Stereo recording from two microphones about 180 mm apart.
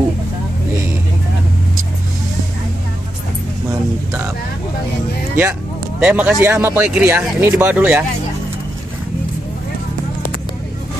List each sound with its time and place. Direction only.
5.3 s vehicle: 10° right (ahead or behind)
6.4 s speech: 10° right (ahead or behind)